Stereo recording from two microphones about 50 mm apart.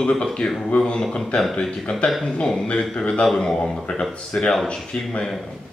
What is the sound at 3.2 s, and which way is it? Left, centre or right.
Speech, centre.